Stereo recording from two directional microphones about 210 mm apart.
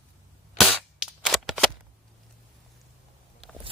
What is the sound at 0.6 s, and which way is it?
Cap gun, centre (ahead or behind).